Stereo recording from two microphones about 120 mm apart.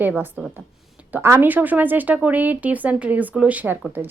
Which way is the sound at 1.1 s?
20° right (ahead or behind).